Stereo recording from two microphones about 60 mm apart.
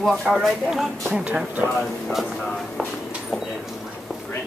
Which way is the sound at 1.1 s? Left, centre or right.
Centre.